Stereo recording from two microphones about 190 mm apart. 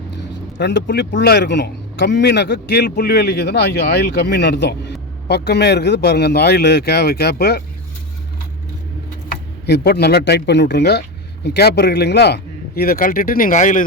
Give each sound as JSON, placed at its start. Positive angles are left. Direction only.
{"t": 0.6, "sound": "speech", "side_deg": 65}
{"t": 9.6, "sound": "a man's voice", "side_deg": 60}